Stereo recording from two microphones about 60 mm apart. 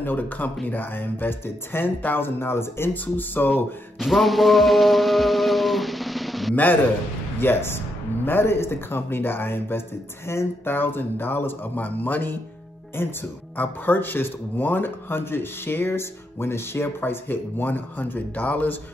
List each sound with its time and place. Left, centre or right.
0.0 s speech: left
4.0 s music: centre
6.5 s a man's voice: left
7.3 s speech: left